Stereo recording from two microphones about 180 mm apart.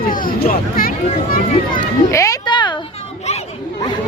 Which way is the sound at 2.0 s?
15° left (ahead or behind).